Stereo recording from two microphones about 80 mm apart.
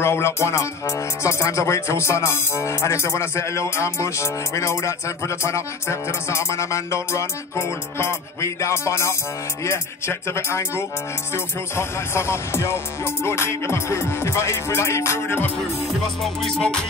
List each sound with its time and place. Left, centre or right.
0.0 s speech: left
16.2 s music: centre